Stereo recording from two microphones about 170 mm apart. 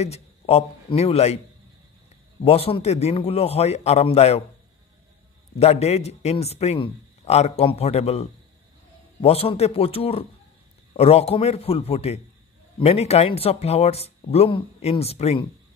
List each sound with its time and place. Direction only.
0.0 s a man's voice: 40° left (ahead or behind)
2.4 s a man's voice: 35° left (ahead or behind)
5.6 s a man's voice: 40° left (ahead or behind)